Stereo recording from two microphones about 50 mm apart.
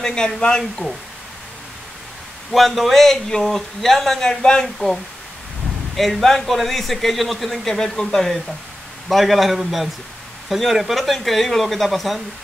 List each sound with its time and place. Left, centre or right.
0.0 s a man's voice: centre
2.5 s a man's voice: centre
4.7 s a man's voice: centre